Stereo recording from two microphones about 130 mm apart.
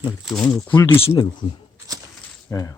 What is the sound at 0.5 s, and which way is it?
Speech, 15° left (ahead or behind).